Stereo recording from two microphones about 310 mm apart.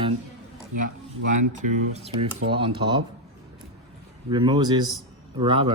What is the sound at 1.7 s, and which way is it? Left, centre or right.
Speech, centre.